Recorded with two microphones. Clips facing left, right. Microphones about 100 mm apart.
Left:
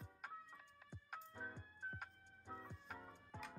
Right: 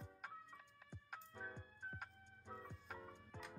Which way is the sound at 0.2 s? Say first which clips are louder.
Left 1 dB; centre (ahead or behind).